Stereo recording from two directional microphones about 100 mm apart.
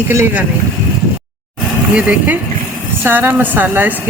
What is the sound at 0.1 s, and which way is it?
Speech, 25° right (ahead or behind).